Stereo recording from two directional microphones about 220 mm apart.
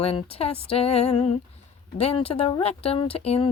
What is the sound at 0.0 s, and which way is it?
Speech, 25° left (ahead or behind).